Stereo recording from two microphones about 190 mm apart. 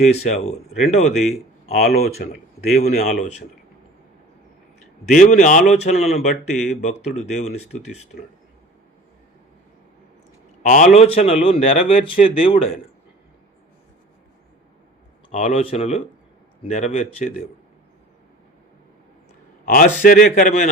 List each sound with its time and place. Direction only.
0.0 s a man's voice: 35° left (ahead or behind)
2.2 s a man's voice: 50° left (ahead or behind)
2.7 s a man's voice: 35° left (ahead or behind)
5.0 s a man's voice: 40° left (ahead or behind)
10.6 s a man's voice: 40° left (ahead or behind)
15.3 s a man's voice: 35° left (ahead or behind)
19.6 s a man's voice: 45° left (ahead or behind)